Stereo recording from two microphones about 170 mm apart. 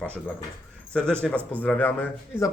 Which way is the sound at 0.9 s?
5° left (ahead or behind).